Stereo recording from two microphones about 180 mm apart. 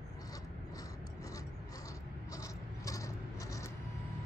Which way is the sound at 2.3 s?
20° left (ahead or behind).